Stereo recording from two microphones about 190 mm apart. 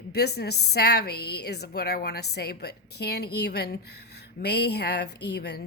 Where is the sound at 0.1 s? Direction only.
60° left (ahead or behind).